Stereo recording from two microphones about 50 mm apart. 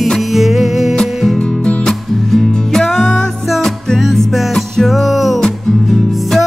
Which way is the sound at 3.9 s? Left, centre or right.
Centre.